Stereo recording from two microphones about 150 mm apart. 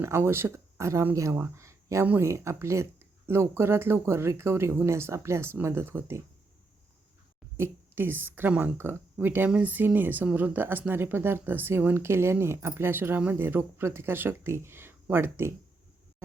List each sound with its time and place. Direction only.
0.0 s speech: 15° right (ahead or behind)
7.5 s speech: 15° right (ahead or behind)